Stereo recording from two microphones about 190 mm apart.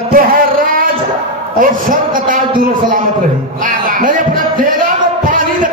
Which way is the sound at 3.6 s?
45° right (ahead or behind).